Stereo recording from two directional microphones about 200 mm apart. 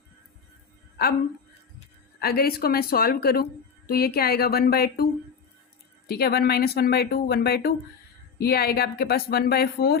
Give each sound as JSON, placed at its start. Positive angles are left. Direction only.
{"t": 2.1, "sound": "speech", "side_deg": 50}
{"t": 6.1, "sound": "speech", "side_deg": 50}